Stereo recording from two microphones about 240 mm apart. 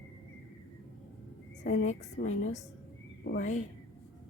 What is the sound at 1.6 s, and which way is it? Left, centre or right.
A woman's voice, left.